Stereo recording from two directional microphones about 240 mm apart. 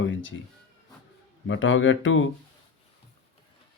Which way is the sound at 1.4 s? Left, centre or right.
Left.